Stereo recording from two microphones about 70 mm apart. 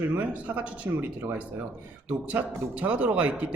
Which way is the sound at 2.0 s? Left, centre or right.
Right.